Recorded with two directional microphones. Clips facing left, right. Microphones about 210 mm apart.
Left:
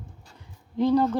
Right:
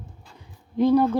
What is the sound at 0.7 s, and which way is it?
Speech, 10° right (ahead or behind).